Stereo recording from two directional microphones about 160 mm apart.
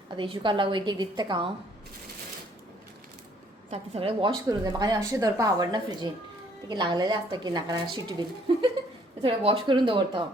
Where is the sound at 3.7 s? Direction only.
35° right (ahead or behind).